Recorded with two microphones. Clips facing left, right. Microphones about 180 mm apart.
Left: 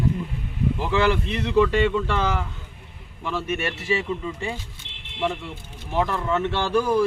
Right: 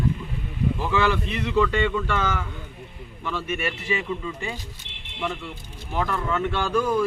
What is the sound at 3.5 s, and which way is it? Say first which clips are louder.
Speech: left 2 dB; 30° left (ahead or behind).